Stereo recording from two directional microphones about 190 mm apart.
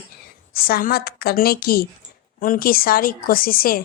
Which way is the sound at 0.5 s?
50° left (ahead or behind).